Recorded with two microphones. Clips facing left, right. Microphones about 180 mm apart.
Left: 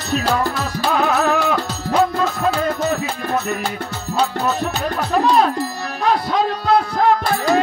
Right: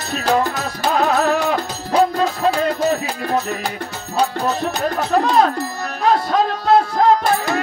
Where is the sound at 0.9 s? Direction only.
40° right (ahead or behind).